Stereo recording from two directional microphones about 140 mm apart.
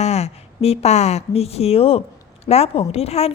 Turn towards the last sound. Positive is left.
turn(degrees=45)  # may be behind; listen again after turning